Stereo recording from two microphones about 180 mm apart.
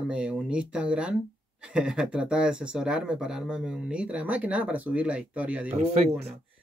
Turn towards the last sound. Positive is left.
turn(degrees=-35)  # may be behind; listen again after turning